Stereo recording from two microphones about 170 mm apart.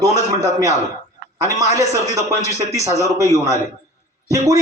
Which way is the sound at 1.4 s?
20° right (ahead or behind).